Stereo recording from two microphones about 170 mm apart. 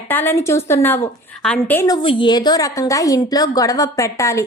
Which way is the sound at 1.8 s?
25° left (ahead or behind).